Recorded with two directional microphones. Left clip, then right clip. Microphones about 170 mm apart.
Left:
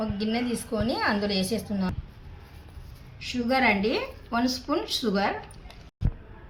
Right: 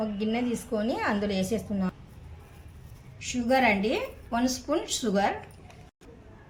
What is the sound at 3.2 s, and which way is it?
A woman's voice, 20° right (ahead or behind).